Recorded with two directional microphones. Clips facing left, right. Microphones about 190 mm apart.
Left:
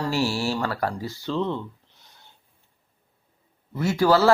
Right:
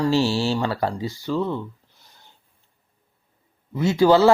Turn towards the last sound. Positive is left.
turn(degrees=-20)  # may be behind; listen again after turning